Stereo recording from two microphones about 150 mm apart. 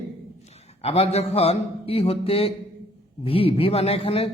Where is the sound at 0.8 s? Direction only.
45° left (ahead or behind).